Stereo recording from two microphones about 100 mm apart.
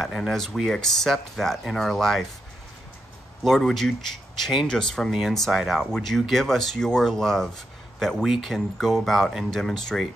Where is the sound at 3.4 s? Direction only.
5° left (ahead or behind).